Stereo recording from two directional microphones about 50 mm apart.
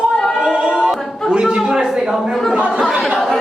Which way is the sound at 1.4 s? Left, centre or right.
Centre.